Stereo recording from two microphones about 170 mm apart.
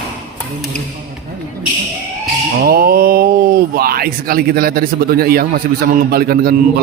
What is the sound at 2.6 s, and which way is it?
Speech, 65° right (ahead or behind).